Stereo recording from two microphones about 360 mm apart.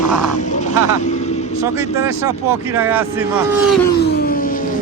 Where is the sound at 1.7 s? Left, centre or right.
Centre.